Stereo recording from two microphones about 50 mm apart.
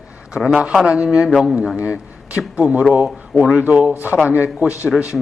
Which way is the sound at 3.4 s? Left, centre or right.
Right.